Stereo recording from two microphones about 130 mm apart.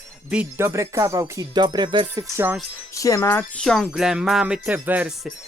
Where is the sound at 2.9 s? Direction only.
25° left (ahead or behind).